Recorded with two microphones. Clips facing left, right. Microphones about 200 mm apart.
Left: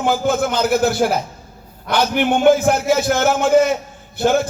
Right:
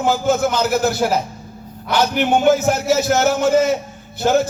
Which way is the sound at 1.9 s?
50° left (ahead or behind).